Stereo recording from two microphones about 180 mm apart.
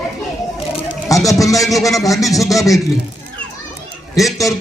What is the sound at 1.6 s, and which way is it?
Speech, centre (ahead or behind).